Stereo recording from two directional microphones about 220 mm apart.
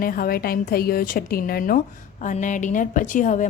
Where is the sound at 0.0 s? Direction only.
40° left (ahead or behind).